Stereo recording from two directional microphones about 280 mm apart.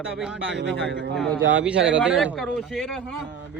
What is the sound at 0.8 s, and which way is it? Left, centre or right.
Speech, right.